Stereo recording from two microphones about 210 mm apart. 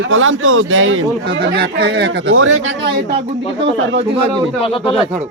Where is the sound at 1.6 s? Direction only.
50° right (ahead or behind).